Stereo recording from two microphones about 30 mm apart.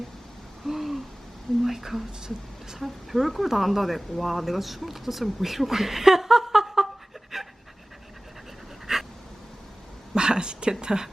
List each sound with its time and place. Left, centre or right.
0.6 s gasp: centre
1.6 s speech: centre
7.3 s pant: centre
8.9 s a sound: centre
10.2 s speech: right